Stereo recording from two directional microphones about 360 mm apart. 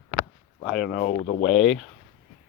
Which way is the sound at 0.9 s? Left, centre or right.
Left.